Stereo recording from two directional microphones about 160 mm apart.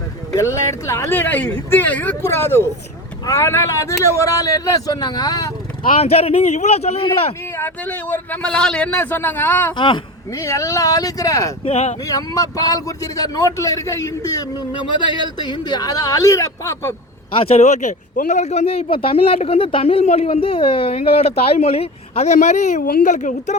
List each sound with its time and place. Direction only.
0.3 s a man's voice: 20° left (ahead or behind)
6.0 s speech: 40° left (ahead or behind)
7.5 s speech: 10° left (ahead or behind)
9.7 s a man's voice: 30° left (ahead or behind)
11.6 s speech: 40° left (ahead or behind)
12.0 s a man's voice: 20° left (ahead or behind)
17.5 s speech: 45° left (ahead or behind)